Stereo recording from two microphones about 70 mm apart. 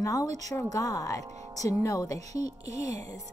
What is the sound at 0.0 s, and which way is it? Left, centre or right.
A woman's voice, left.